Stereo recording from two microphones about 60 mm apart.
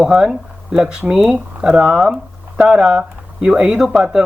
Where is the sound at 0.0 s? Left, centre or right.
Centre.